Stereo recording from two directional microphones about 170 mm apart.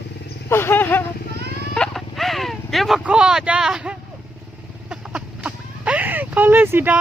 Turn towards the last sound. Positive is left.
turn(degrees=-10)  # may be behind; listen again after turning